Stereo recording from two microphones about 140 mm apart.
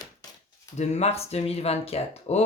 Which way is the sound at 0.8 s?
50° left (ahead or behind).